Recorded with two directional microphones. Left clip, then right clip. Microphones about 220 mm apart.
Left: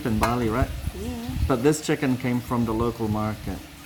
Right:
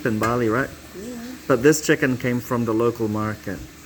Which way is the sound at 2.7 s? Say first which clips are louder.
Right 8 dB; 25° right (ahead or behind).